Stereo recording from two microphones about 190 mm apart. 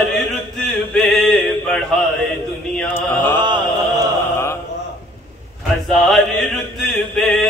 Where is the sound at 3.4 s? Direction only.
25° right (ahead or behind).